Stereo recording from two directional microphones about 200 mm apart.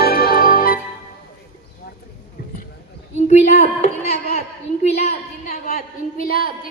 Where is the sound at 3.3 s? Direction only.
35° left (ahead or behind).